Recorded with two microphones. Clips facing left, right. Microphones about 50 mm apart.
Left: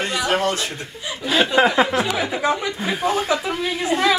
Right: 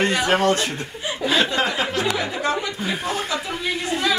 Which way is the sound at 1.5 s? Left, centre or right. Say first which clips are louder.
Left 6 dB; centre.